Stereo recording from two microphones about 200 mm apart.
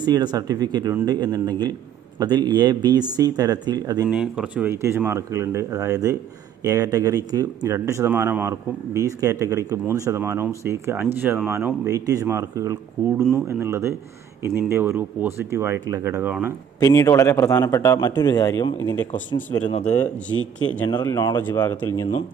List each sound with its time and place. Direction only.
0.0 s speech: 20° right (ahead or behind)
4.1 s speech: 5° right (ahead or behind)
16.8 s speech: 15° left (ahead or behind)
20.9 s speech: 15° left (ahead or behind)